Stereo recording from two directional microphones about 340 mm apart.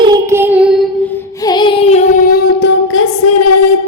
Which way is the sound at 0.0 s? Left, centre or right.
Centre.